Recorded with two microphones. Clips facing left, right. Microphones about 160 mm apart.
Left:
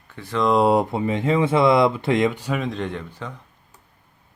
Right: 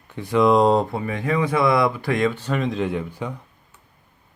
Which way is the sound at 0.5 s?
5° left (ahead or behind).